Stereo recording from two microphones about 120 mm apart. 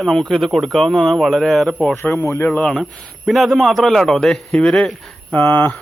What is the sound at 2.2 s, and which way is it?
Speech, 15° left (ahead or behind).